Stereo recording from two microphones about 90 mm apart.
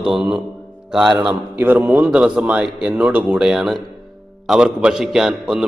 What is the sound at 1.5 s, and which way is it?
A man's voice, 20° right (ahead or behind).